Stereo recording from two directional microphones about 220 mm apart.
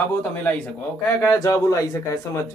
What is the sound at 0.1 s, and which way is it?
Speech, 10° left (ahead or behind).